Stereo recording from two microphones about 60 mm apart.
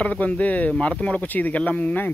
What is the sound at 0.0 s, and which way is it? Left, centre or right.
Speech, left.